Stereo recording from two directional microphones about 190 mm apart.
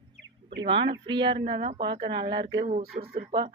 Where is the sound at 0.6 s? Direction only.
25° right (ahead or behind).